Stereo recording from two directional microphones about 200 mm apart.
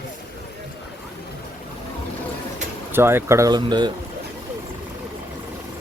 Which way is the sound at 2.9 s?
10° right (ahead or behind).